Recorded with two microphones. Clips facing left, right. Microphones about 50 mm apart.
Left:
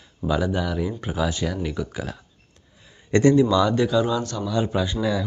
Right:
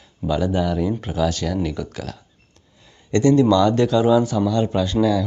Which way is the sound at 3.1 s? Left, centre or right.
Left.